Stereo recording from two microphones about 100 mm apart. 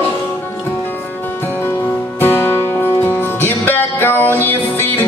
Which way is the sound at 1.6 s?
20° left (ahead or behind).